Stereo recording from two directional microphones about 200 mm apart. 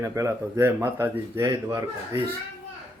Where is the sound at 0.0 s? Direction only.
15° right (ahead or behind).